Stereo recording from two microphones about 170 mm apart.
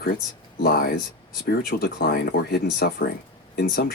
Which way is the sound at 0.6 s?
60° left (ahead or behind).